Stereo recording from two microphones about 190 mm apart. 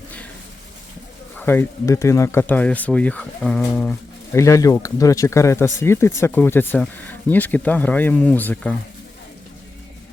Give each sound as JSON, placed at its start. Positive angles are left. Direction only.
{"t": 1.4, "sound": "speech", "side_deg": 10}